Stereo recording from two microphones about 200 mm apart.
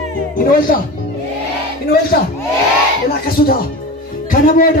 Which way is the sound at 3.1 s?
50° left (ahead or behind).